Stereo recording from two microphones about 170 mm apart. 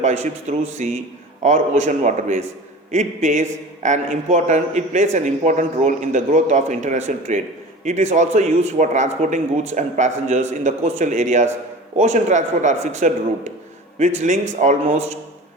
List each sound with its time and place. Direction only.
0.0 s a man's voice: 45° right (ahead or behind)